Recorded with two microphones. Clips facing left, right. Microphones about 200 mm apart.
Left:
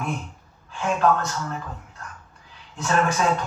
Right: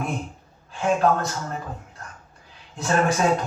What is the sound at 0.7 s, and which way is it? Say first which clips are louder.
A man's voice: right 1 dB; 35° right (ahead or behind).